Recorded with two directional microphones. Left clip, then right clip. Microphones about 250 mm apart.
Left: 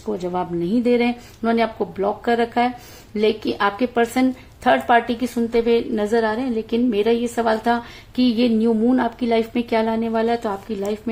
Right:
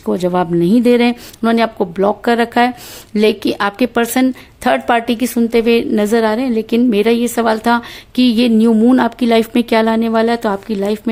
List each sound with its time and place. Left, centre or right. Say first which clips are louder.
0.0 s speech: right 8 dB; right